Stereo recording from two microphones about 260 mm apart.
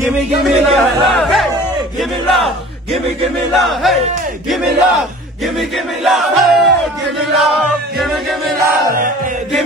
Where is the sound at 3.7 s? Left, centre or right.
Centre.